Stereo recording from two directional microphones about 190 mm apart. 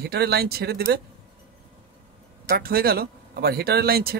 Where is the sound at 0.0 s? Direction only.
55° right (ahead or behind).